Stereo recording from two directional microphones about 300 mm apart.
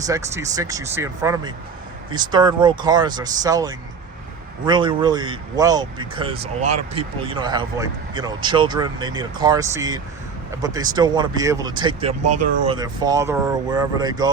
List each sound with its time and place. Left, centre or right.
0.1 s speech: centre